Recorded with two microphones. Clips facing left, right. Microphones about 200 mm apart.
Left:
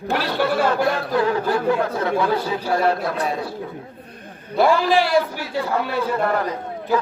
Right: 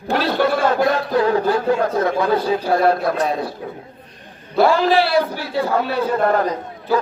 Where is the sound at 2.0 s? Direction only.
40° right (ahead or behind).